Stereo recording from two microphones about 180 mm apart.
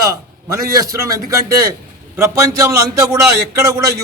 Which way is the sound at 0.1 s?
20° right (ahead or behind).